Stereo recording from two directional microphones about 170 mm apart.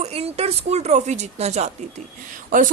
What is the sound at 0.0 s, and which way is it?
Speech, 35° right (ahead or behind).